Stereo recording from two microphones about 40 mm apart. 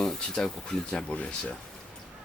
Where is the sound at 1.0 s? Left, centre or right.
Left.